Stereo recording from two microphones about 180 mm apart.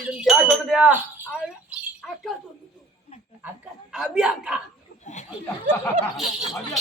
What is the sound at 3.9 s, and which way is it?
Speech, 5° right (ahead or behind).